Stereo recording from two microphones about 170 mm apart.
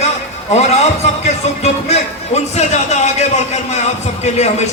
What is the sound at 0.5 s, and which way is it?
A man's voice, 40° left (ahead or behind).